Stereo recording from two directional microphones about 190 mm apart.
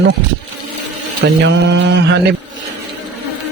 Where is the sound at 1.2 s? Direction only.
65° right (ahead or behind).